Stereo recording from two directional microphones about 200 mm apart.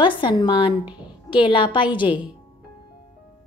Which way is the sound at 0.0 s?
25° left (ahead or behind).